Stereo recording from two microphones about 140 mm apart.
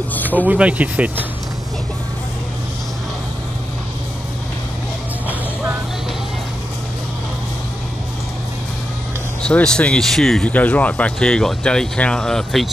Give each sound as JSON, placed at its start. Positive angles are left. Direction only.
{"t": 0.3, "sound": "speech", "side_deg": -10}
{"t": 9.4, "sound": "speech", "side_deg": 5}